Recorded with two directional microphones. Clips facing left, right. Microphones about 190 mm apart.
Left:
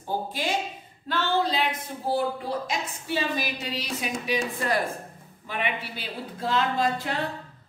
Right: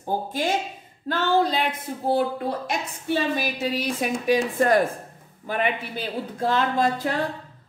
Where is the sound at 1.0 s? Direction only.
45° right (ahead or behind).